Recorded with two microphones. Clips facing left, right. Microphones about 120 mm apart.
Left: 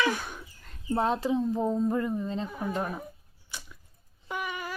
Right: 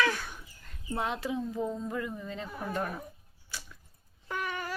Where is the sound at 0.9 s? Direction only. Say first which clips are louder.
Left 6 dB; 35° left (ahead or behind).